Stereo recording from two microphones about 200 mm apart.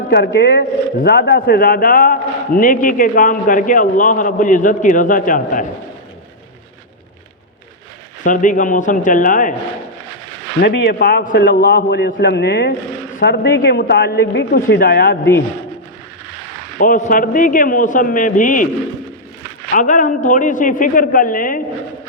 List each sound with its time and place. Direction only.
0.1 s a man's voice: 55° left (ahead or behind)
8.2 s a man's voice: 40° left (ahead or behind)
10.6 s a man's voice: 55° left (ahead or behind)
16.7 s a man's voice: 40° left (ahead or behind)
19.7 s a man's voice: 40° left (ahead or behind)